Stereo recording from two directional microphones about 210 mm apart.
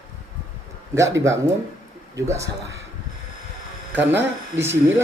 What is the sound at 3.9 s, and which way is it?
Speech, 10° right (ahead or behind).